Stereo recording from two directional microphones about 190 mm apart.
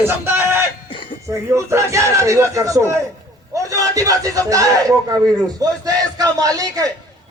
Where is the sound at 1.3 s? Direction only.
15° right (ahead or behind).